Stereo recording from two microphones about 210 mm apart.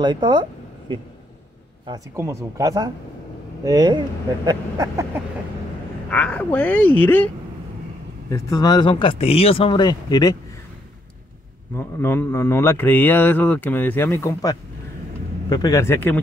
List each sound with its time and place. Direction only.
0.0 s speech: 20° right (ahead or behind)
6.0 s speech: 5° left (ahead or behind)
8.3 s speech: 15° left (ahead or behind)
11.7 s speech: 10° left (ahead or behind)